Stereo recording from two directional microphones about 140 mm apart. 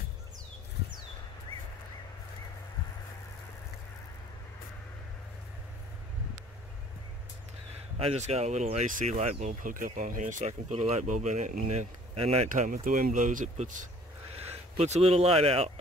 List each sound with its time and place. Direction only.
8.0 s speech: 50° right (ahead or behind)
12.4 s speech: 65° right (ahead or behind)
14.3 s speech: 50° right (ahead or behind)